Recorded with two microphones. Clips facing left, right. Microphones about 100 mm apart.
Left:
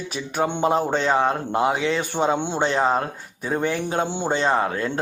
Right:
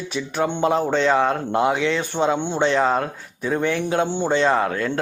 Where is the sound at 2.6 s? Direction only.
30° left (ahead or behind).